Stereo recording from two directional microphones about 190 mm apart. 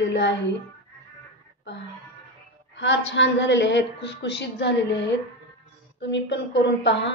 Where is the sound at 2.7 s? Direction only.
70° left (ahead or behind).